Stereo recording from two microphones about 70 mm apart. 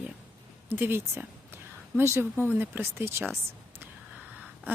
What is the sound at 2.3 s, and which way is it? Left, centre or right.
Speech, right.